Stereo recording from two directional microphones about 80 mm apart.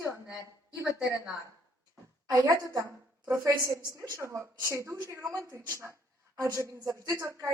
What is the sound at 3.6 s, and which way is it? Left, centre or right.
A woman's voice, right.